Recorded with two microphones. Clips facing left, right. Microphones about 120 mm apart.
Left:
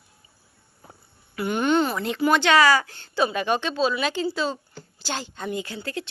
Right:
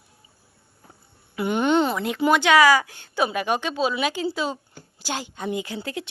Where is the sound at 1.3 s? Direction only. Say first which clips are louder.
Right 1 dB; 20° right (ahead or behind).